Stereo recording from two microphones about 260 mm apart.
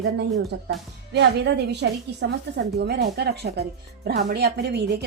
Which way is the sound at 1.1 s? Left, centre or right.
Right.